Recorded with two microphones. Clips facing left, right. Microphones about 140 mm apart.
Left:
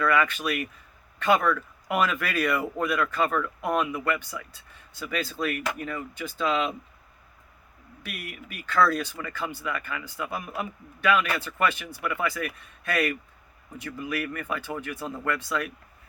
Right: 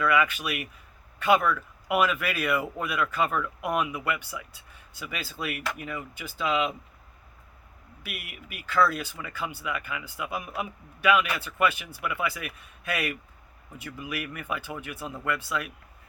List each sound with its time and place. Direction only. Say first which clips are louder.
0.0 s speech: left 1 dB; 10° right (ahead or behind)
8.0 s speech: left 3 dB; 5° right (ahead or behind)